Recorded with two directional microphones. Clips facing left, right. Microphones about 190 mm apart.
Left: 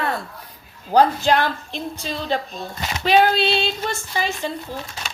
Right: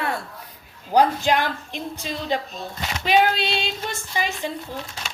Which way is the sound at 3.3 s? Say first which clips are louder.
Left 5 dB; 35° left (ahead or behind).